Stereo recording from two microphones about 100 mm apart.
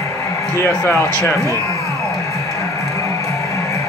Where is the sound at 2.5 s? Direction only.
30° left (ahead or behind).